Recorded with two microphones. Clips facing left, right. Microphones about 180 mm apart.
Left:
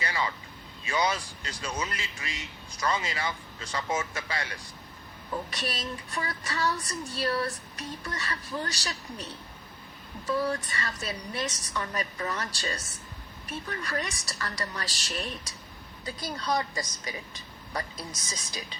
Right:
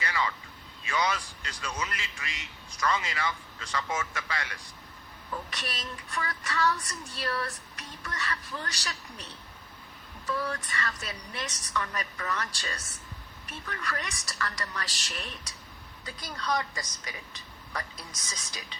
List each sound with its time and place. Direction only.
0.0 s vehicle: 30° left (ahead or behind)
0.9 s a man's voice: 30° left (ahead or behind)
5.3 s child singing: 30° left (ahead or behind)
10.2 s child singing: 30° left (ahead or behind)
11.8 s a man's voice: 30° left (ahead or behind)
13.7 s child singing: 30° left (ahead or behind)
18.3 s child singing: 30° left (ahead or behind)